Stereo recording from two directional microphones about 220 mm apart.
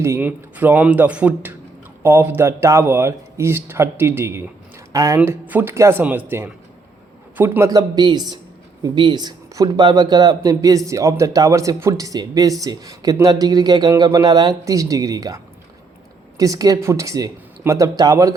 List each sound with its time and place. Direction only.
0.0 s speech: 10° right (ahead or behind)
16.4 s speech: 15° right (ahead or behind)